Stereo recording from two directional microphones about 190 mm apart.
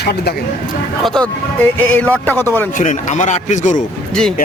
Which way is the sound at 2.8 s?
40° left (ahead or behind).